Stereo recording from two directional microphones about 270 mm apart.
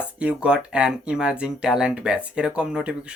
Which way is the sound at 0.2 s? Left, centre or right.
Centre.